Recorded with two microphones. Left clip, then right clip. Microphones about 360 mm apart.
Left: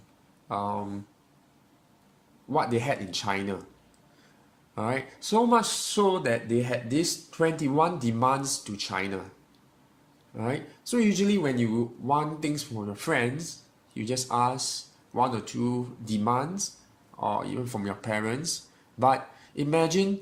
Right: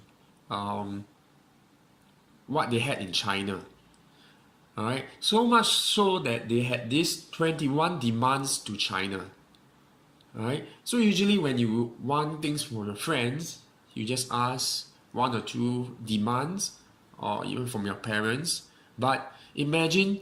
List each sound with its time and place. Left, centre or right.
0.4 s speech: centre
2.7 s speech: centre
4.7 s speech: centre
10.3 s speech: centre